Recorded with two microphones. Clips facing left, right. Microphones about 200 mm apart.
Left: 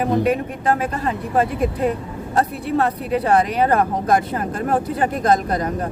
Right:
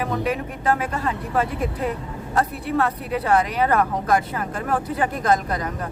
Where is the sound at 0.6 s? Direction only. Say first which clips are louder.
Left 2 dB; 35° left (ahead or behind).